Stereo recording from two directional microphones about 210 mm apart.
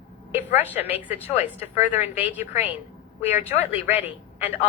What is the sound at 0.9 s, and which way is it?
Speech, 10° right (ahead or behind).